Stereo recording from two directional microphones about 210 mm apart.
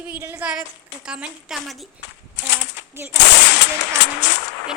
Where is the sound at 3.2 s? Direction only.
55° left (ahead or behind).